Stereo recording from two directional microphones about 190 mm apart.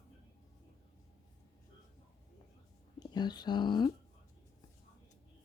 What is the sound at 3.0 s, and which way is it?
Speech, 20° left (ahead or behind).